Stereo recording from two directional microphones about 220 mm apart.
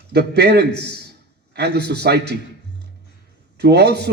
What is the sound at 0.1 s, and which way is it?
A man's voice, 50° right (ahead or behind).